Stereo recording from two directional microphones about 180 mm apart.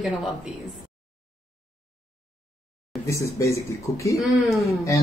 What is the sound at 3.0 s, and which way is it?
Speech, 15° left (ahead or behind).